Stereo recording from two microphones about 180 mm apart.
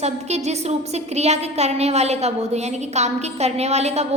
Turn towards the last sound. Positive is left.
turn(degrees=-35)  # may be behind; listen again after turning